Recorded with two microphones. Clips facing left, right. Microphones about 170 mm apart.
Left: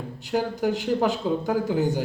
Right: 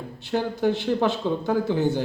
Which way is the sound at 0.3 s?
10° left (ahead or behind).